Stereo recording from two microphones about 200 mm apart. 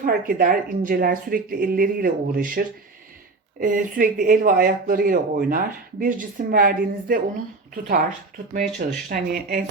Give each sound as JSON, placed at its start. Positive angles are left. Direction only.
{"t": 0.0, "sound": "speech", "side_deg": -45}
{"t": 8.5, "sound": "speech", "side_deg": -45}